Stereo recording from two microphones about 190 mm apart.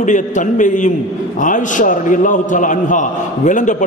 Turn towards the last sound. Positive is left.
turn(degrees=40)  # may be behind; listen again after turning